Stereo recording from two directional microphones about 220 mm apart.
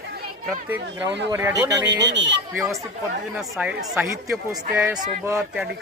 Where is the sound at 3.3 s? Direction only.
5° right (ahead or behind).